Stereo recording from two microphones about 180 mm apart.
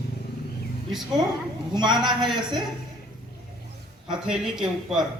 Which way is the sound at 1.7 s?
25° right (ahead or behind).